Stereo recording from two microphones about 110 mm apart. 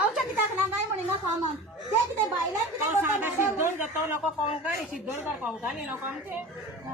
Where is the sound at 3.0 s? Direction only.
20° right (ahead or behind).